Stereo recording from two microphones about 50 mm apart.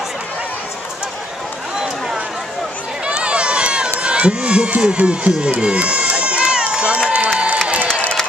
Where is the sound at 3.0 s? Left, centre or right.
Right.